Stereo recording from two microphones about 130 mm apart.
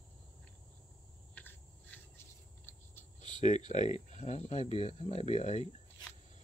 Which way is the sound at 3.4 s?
65° left (ahead or behind).